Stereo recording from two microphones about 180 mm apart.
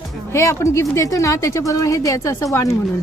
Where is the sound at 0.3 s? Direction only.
15° left (ahead or behind).